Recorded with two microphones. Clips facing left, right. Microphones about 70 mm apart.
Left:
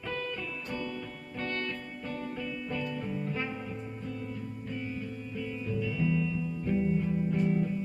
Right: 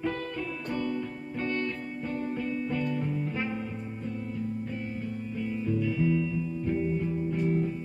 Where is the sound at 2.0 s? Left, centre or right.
Right.